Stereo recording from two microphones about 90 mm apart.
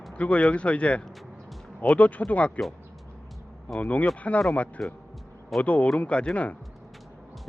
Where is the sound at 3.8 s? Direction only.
15° left (ahead or behind).